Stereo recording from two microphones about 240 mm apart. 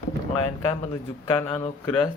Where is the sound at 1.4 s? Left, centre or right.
Left.